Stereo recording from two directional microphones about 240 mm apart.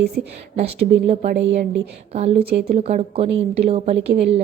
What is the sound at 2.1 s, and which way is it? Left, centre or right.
Speech, right.